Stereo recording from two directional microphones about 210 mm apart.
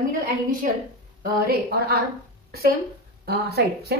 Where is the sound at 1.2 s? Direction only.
45° right (ahead or behind).